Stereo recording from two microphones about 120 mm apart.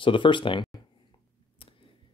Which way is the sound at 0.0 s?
45° left (ahead or behind).